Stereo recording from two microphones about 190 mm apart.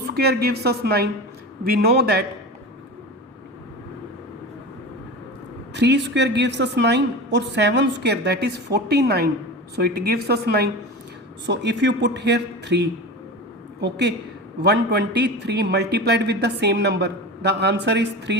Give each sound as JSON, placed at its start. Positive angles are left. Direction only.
{"t": 0.2, "sound": "a man's voice", "side_deg": -55}
{"t": 5.7, "sound": "a man's voice", "side_deg": -65}
{"t": 11.4, "sound": "a man's voice", "side_deg": -65}